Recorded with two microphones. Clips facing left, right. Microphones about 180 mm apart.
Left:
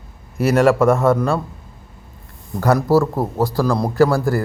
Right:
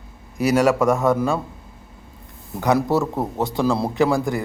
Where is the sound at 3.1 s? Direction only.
Centre (ahead or behind).